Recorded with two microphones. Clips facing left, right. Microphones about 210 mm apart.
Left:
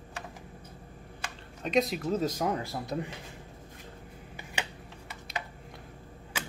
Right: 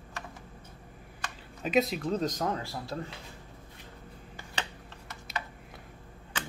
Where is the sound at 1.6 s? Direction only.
Centre (ahead or behind); by 3.1 s 20° left (ahead or behind).